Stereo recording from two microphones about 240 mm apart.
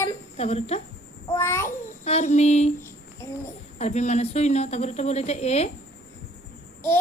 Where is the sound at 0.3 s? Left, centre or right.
Left.